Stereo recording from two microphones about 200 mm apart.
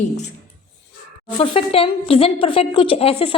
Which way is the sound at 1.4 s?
30° left (ahead or behind).